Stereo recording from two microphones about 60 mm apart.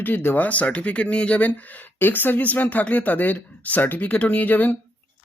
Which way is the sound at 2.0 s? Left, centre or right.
Left.